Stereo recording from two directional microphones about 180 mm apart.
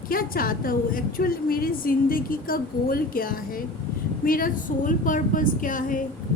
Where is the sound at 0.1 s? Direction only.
55° left (ahead or behind).